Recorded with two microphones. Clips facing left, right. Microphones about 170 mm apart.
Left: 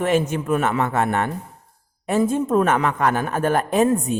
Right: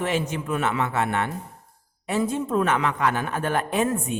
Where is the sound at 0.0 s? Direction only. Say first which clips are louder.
Left 6 dB; 50° left (ahead or behind).